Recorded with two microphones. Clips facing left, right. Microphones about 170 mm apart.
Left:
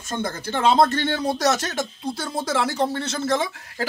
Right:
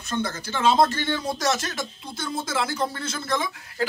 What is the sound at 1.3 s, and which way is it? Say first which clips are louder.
Speech: left 4 dB; 40° left (ahead or behind).